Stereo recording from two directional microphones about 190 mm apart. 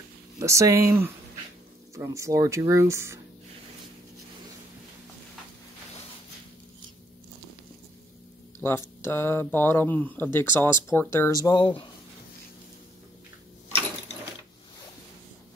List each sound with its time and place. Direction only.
0.4 s speech: 15° right (ahead or behind)
8.5 s speech: 15° left (ahead or behind)